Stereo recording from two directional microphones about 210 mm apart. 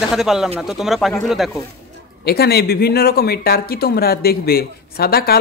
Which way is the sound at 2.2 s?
50° left (ahead or behind).